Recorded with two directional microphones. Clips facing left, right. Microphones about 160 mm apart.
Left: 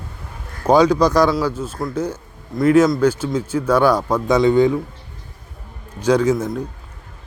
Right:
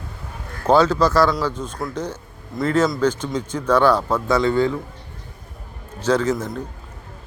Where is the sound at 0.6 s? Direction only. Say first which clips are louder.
Left 2 dB; 15° left (ahead or behind).